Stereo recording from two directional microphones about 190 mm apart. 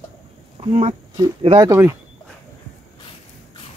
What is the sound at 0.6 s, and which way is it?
Speech, 35° right (ahead or behind).